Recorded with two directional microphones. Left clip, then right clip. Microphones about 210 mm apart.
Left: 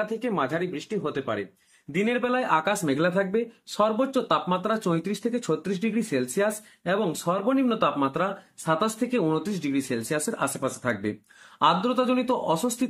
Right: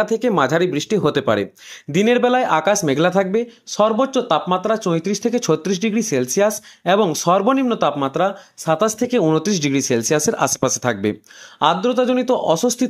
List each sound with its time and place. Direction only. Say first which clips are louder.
0.0 s speech: right 10 dB; 45° right (ahead or behind)